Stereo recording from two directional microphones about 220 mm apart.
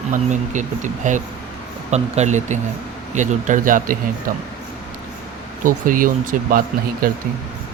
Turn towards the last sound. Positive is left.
turn(degrees=-40)  # may be behind; listen again after turning